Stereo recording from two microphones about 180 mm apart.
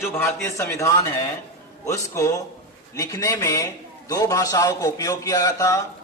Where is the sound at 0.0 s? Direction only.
15° left (ahead or behind).